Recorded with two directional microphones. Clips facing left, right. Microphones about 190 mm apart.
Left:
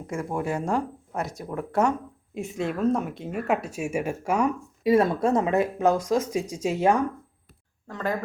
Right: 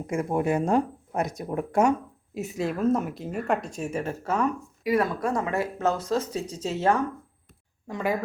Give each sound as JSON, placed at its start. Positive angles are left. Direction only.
{"t": 0.1, "sound": "speech", "side_deg": -20}
{"t": 2.4, "sound": "speech", "side_deg": 0}
{"t": 4.8, "sound": "speech", "side_deg": 25}
{"t": 7.9, "sound": "speech", "side_deg": -10}